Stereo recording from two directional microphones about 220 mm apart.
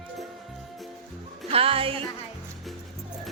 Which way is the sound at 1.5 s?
25° right (ahead or behind).